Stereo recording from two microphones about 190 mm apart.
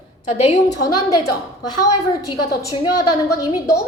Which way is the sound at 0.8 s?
20° left (ahead or behind).